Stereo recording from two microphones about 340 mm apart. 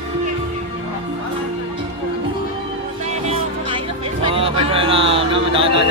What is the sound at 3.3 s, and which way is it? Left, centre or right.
Music, centre.